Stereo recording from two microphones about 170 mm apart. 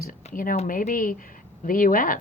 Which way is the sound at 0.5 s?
45° left (ahead or behind).